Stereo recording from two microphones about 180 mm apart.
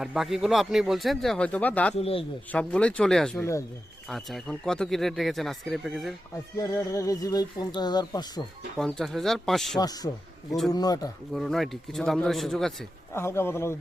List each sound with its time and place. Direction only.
0.0 s speech: centre (ahead or behind)
2.0 s speech: 35° left (ahead or behind)
2.5 s speech: 5° left (ahead or behind)
6.6 s speech: 15° left (ahead or behind)
8.8 s speech: centre (ahead or behind)
9.7 s speech: 20° left (ahead or behind)
11.3 s speech: centre (ahead or behind)
13.1 s a man's voice: 15° left (ahead or behind)